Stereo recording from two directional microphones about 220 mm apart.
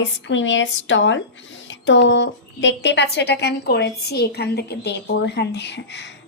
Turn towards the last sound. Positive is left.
turn(degrees=50)  # may be behind; listen again after turning